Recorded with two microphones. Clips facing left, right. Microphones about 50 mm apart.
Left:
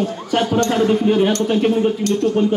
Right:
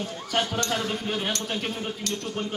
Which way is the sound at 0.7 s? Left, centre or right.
Centre.